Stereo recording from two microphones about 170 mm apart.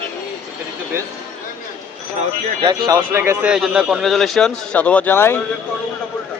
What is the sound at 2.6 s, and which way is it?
Speech, 25° right (ahead or behind).